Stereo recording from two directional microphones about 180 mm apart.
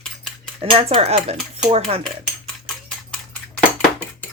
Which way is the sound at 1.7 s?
35° right (ahead or behind).